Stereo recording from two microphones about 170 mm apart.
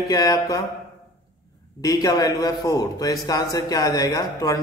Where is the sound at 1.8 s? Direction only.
20° left (ahead or behind).